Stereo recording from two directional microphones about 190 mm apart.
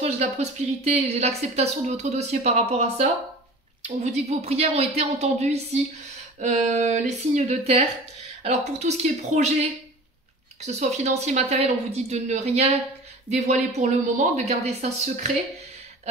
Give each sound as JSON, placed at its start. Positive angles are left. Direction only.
{"t": 0.0, "sound": "a woman's voice", "side_deg": -35}